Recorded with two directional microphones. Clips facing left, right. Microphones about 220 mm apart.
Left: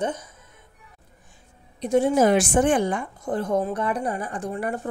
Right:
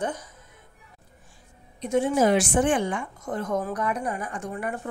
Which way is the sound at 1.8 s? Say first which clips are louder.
Left 3 dB; 35° left (ahead or behind).